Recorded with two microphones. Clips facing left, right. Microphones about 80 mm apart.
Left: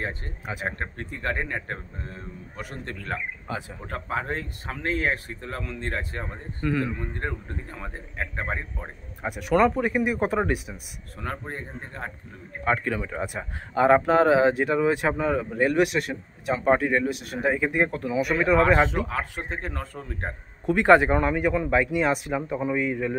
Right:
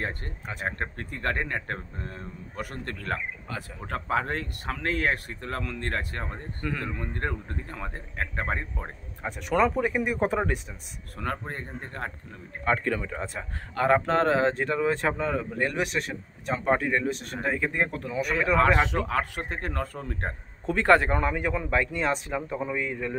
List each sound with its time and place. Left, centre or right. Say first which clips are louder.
0.9 s speech: even; right
3.5 s speech: left 5 dB; centre
3.8 s speech: right 4 dB; right
6.3 s speech: left 9 dB; centre
7.2 s speech: even; right
8.8 s speech: left 2 dB; centre
11.5 s speech: even; right
12.6 s speech: left 1 dB; centre
19.0 s speech: right 2 dB; right
20.2 s a man's voice: even; centre
21.2 s speech: left 4 dB; centre